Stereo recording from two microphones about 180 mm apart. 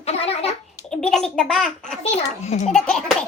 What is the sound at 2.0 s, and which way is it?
Speech, 35° left (ahead or behind).